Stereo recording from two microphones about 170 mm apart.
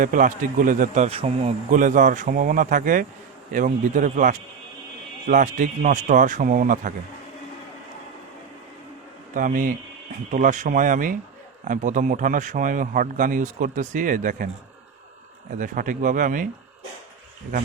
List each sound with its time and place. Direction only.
0.0 s a man's voice: 50° right (ahead or behind)
1.0 s speech: 35° right (ahead or behind)
1.7 s a man's voice: 50° right (ahead or behind)
9.3 s a man's voice: 50° right (ahead or behind)
15.5 s a man's voice: 50° right (ahead or behind)